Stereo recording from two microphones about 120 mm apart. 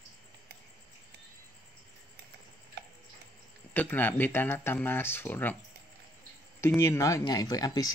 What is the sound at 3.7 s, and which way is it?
Speech, 15° left (ahead or behind).